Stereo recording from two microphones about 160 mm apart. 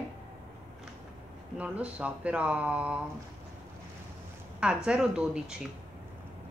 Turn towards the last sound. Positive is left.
turn(degrees=-5)  # may be behind; listen again after turning